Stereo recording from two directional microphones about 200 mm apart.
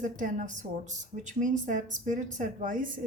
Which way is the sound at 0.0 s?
40° right (ahead or behind).